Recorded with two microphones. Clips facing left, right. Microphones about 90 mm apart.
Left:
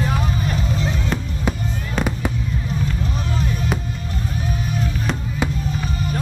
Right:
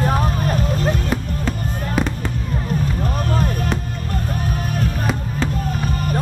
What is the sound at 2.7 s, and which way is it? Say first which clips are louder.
Music: right 5 dB; 50° right (ahead or behind).